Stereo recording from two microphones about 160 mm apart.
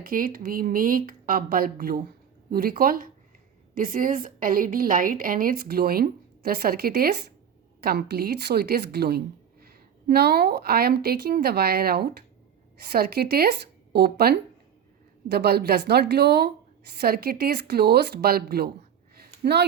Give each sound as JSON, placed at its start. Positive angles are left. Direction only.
{"t": 0.1, "sound": "a woman's voice", "side_deg": -60}
{"t": 7.8, "sound": "a woman's voice", "side_deg": -75}
{"t": 16.9, "sound": "speech", "side_deg": -80}
{"t": 19.1, "sound": "a sound", "side_deg": -75}